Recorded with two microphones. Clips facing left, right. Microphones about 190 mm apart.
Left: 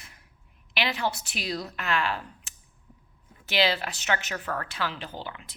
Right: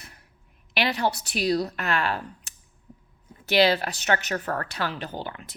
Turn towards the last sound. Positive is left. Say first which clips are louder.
# right 4 dB
turn(degrees=-50)  # may be behind; listen again after turning